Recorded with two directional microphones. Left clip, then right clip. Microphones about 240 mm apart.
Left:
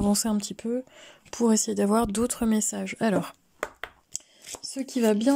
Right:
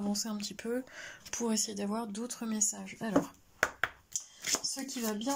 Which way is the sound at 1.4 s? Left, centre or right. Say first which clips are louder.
Left 11 dB; left.